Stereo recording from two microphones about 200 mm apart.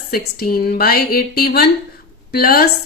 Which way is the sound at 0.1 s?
50° left (ahead or behind).